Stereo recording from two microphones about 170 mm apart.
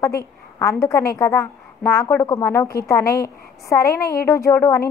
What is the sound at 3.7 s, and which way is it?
A woman's voice, 15° left (ahead or behind).